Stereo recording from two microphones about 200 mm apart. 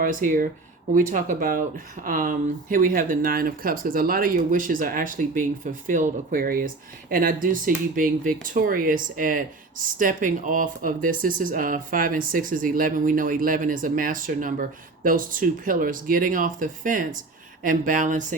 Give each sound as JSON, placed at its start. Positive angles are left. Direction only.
{"t": 0.0, "sound": "speech", "side_deg": -45}